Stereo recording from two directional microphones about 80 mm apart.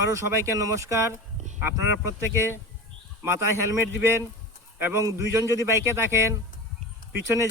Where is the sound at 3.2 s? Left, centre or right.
Right.